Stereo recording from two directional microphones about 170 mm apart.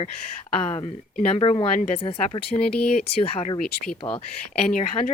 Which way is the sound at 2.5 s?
5° left (ahead or behind).